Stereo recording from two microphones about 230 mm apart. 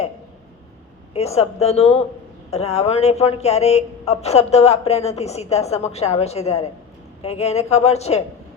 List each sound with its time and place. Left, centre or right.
1.1 s speech: left